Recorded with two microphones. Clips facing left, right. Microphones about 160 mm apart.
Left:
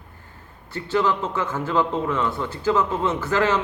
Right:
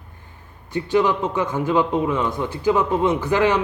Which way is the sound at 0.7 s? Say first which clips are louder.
Right 3 dB; 15° right (ahead or behind).